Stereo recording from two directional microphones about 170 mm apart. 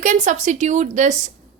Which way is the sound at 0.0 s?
45° right (ahead or behind).